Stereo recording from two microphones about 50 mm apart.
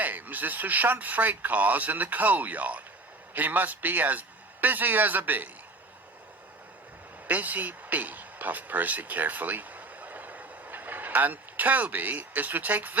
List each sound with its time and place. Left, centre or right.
0.0 s speech: right
7.3 s speech: right